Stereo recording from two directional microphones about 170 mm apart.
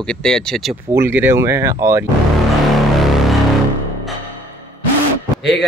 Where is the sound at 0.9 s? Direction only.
15° right (ahead or behind).